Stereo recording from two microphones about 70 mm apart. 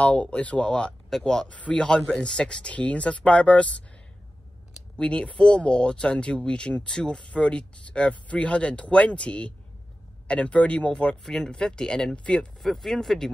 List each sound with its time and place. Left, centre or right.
0.0 s speech: centre
4.9 s speech: centre